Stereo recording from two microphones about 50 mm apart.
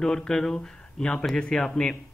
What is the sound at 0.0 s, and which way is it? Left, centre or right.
A man's voice, centre.